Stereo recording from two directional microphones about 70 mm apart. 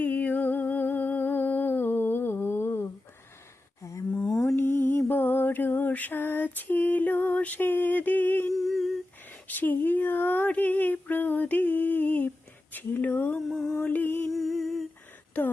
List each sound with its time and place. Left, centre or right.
0.0 s humming: left
4.5 s mantra: left
8.5 s humming: centre
9.5 s a sound: left
12.7 s speech: left
13.5 s mantra: centre
13.8 s mantra: left
14.3 s humming: centre
15.3 s a sound: left